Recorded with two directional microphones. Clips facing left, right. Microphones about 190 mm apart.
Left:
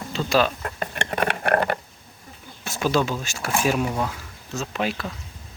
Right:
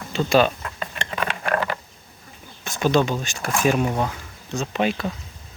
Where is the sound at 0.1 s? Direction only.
Centre (ahead or behind).